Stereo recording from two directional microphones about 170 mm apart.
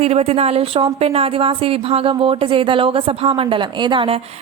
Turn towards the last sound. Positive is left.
turn(degrees=-30)  # may be behind; listen again after turning